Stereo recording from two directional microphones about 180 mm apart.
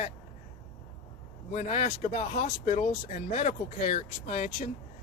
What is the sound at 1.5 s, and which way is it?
Speech, 40° left (ahead or behind).